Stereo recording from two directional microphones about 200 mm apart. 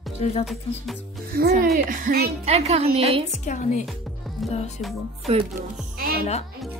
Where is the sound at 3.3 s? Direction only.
35° left (ahead or behind).